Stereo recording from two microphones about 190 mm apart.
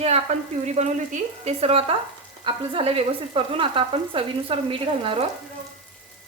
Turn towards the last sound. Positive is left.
turn(degrees=-30)  # may be behind; listen again after turning